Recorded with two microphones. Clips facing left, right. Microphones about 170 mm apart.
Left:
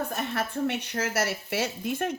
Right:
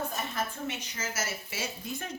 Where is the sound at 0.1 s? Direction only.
65° left (ahead or behind).